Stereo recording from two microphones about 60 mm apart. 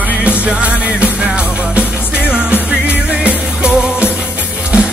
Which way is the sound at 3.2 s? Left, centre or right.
Centre.